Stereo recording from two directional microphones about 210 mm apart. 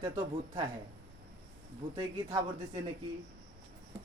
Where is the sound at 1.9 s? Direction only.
20° right (ahead or behind).